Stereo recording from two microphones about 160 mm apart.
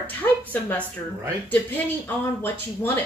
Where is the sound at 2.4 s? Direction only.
15° left (ahead or behind).